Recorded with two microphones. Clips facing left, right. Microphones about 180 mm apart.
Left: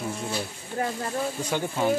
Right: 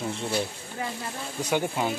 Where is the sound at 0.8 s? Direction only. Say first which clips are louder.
Left 5 dB; 55° left (ahead or behind).